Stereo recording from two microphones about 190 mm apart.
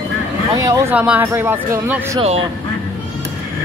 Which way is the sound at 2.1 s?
30° right (ahead or behind).